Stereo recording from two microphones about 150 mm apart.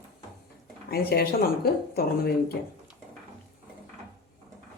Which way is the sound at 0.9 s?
90° left.